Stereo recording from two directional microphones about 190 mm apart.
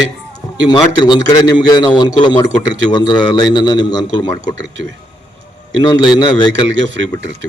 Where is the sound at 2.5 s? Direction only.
75° right (ahead or behind).